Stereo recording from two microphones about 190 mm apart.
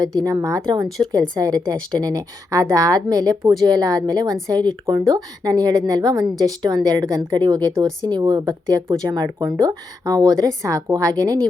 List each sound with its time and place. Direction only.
0.3 s a woman's voice: 20° right (ahead or behind)